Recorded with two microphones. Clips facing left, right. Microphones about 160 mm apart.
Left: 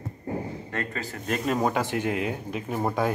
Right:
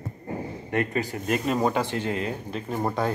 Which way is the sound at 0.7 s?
15° right (ahead or behind).